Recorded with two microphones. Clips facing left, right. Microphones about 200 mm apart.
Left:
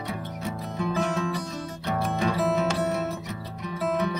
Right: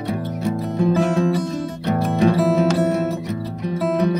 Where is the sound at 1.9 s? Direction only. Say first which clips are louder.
Right 9 dB; 40° right (ahead or behind).